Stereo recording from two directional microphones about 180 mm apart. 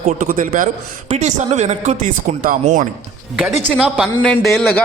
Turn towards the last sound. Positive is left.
turn(degrees=5)  # may be behind; listen again after turning